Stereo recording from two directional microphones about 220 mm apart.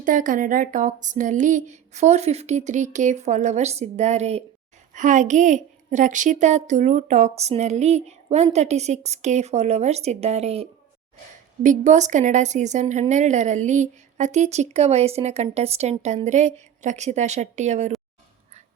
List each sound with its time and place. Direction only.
0.0 s speech: 35° right (ahead or behind)